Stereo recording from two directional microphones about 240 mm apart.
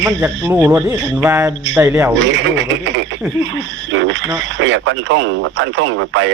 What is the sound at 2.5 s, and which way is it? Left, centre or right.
Speech, right.